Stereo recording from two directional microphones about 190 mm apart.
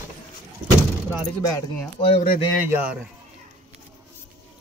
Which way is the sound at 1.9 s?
30° left (ahead or behind).